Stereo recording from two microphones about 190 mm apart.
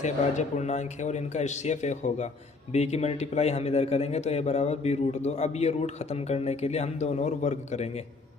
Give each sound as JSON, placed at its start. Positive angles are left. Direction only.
{"t": 0.0, "sound": "a man's voice", "side_deg": 40}